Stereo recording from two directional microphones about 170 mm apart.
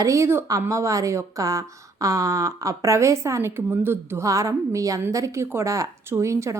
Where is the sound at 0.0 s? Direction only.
15° right (ahead or behind).